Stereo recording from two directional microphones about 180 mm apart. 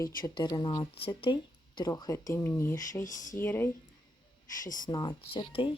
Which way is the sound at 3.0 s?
45° left (ahead or behind).